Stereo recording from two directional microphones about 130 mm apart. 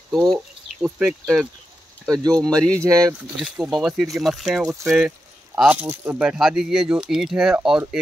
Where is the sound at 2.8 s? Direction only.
25° right (ahead or behind).